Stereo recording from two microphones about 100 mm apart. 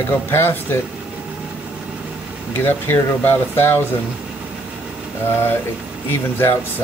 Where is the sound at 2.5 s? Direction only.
20° left (ahead or behind).